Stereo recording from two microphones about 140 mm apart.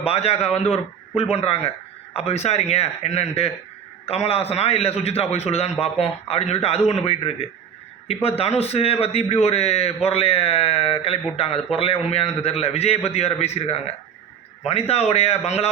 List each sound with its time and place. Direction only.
0.0 s a man's voice: 45° left (ahead or behind)